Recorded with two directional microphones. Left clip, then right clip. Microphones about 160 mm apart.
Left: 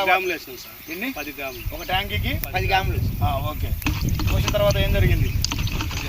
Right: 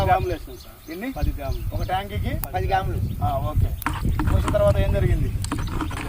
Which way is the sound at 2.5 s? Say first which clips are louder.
Left 1 dB; 10° right (ahead or behind).